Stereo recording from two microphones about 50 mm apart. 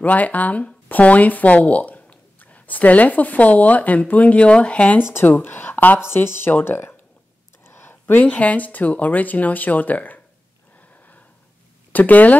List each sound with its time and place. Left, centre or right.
0.0 s speech: left
5.2 s speech: left
6.0 s speech: left
7.6 s a sound: left
8.2 s speech: left
11.9 s speech: left